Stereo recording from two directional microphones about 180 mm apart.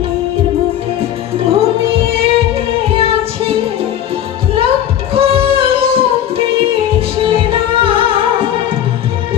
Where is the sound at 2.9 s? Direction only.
30° right (ahead or behind).